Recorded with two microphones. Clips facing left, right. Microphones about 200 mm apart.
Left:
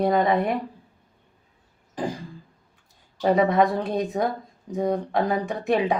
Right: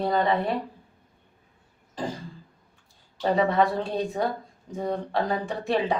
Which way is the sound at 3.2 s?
15° left (ahead or behind).